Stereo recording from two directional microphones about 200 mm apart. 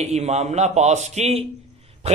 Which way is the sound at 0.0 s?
35° right (ahead or behind).